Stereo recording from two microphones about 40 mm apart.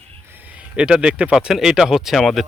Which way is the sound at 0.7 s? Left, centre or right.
Right.